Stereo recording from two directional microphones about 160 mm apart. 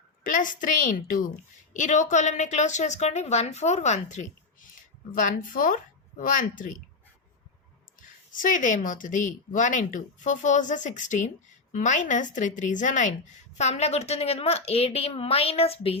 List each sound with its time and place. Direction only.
0.3 s a child's voice: 55° left (ahead or behind)
8.0 s a woman's voice: 55° left (ahead or behind); by 16.0 s 40° left (ahead or behind)